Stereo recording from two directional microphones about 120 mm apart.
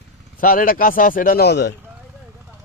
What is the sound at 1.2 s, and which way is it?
Speech, 90° left.